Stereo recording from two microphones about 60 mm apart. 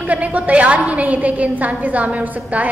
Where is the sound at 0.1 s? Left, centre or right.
Right.